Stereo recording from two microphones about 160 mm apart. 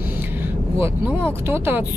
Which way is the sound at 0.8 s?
15° right (ahead or behind).